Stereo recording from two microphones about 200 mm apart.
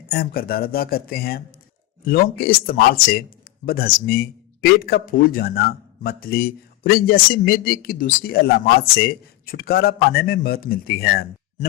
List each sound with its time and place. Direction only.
0.1 s speech: 50° left (ahead or behind)